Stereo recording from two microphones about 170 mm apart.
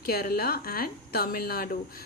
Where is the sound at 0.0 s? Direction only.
65° left (ahead or behind).